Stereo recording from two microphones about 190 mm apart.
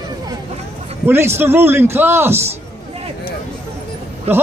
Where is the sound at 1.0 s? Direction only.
10° right (ahead or behind).